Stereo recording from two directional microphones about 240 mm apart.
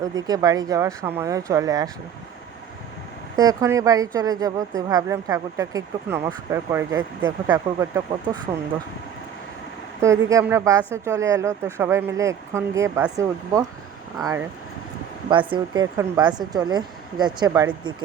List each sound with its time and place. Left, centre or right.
0.0 s a woman's voice: centre
3.3 s a woman's voice: centre
10.0 s a woman's voice: centre